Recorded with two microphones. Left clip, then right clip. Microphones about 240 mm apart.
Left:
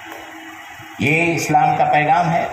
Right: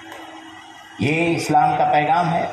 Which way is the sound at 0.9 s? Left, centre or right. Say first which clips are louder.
Left 3 dB; left.